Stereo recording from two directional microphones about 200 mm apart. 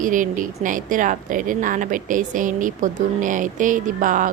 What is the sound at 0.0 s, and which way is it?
A woman's voice, 40° right (ahead or behind).